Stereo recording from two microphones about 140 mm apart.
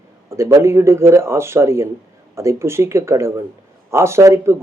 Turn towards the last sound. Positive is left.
turn(degrees=-20)  # may be behind; listen again after turning